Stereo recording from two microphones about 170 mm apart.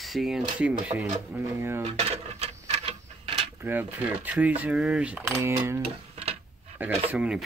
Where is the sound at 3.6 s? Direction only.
10° right (ahead or behind).